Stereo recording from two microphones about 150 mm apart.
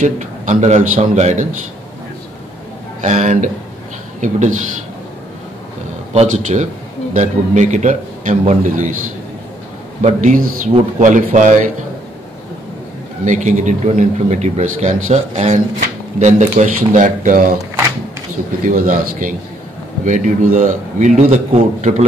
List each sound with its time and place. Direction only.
0.0 s speech: 55° right (ahead or behind)
3.0 s speech: 50° right (ahead or behind)
6.1 s speech: 50° right (ahead or behind)
10.0 s a man's voice: 60° right (ahead or behind)
13.2 s a man's voice: 55° right (ahead or behind)
18.6 s a man's voice: 65° right (ahead or behind); by 22.0 s 45° right (ahead or behind)